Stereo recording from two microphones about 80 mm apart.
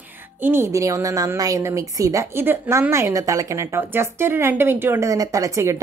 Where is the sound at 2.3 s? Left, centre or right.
Right.